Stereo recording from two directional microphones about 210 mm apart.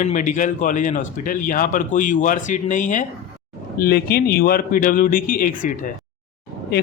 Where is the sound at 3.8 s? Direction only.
45° left (ahead or behind).